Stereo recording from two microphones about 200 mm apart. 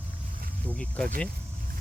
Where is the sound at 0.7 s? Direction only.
5° left (ahead or behind).